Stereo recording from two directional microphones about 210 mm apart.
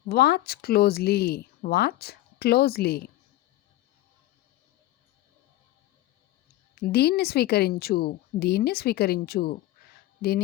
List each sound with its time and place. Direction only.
0.1 s speech: 50° left (ahead or behind)
6.8 s speech: 50° left (ahead or behind)